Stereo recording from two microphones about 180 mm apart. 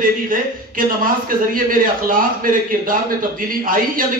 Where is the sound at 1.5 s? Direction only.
50° right (ahead or behind).